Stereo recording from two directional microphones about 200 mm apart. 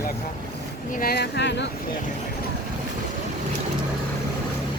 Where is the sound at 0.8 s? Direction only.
45° left (ahead or behind); by 1.7 s 60° left (ahead or behind).